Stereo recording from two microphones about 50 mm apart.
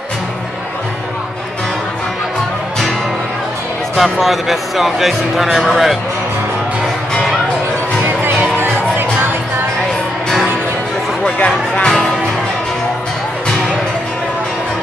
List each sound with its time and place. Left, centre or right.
3.9 s speech: centre
8.0 s music: right
11.4 s music: centre